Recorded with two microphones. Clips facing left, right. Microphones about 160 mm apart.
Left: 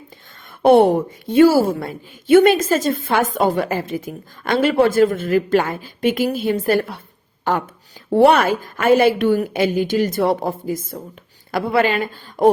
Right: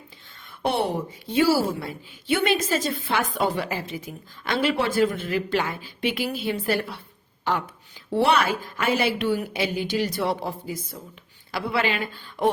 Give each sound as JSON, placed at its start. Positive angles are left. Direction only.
{"t": 0.6, "sound": "a woman's voice", "side_deg": 50}